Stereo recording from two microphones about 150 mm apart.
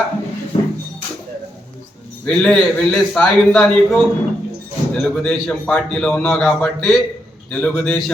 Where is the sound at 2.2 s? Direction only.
5° left (ahead or behind).